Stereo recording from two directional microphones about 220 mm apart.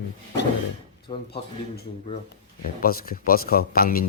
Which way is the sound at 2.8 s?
40° left (ahead or behind).